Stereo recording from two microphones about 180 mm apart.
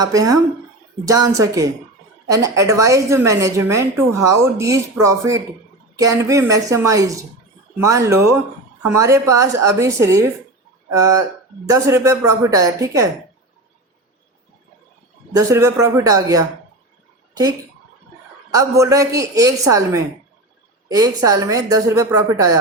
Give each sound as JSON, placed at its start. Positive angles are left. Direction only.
{"t": 0.0, "sound": "a woman's voice", "side_deg": -20}
{"t": 15.4, "sound": "a woman's voice", "side_deg": -15}
{"t": 18.5, "sound": "a woman's voice", "side_deg": -20}